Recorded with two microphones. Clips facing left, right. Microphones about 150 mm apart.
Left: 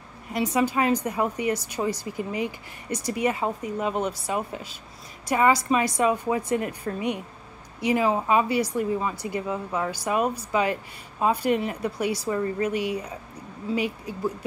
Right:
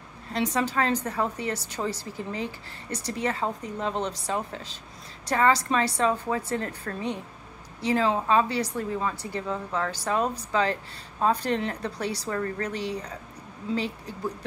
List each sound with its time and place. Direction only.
0.3 s a woman's voice: 10° left (ahead or behind)